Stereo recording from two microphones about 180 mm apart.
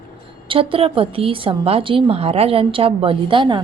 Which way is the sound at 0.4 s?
30° right (ahead or behind).